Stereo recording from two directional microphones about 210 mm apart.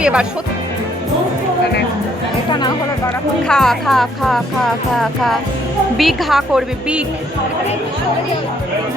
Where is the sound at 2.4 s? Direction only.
20° left (ahead or behind).